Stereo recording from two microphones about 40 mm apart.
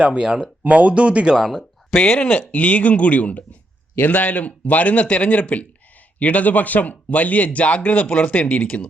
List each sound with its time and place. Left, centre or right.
0.0 s speech: right
0.6 s speech: right
1.4 s speech: centre
2.1 s a man's voice: left